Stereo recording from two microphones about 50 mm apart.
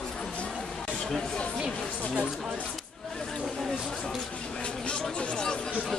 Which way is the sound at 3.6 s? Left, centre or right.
Centre.